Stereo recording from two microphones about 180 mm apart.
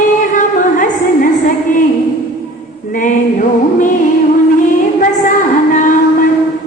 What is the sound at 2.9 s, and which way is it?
Music, 45° left (ahead or behind).